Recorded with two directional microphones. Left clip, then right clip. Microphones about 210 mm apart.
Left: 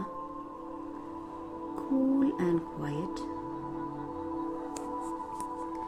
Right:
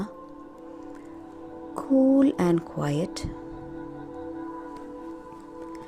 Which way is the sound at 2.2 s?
50° right (ahead or behind).